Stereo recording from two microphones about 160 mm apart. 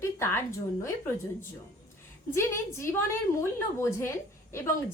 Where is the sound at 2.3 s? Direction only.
15° left (ahead or behind).